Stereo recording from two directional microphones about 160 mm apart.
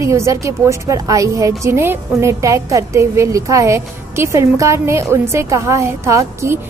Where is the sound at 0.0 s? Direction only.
20° right (ahead or behind).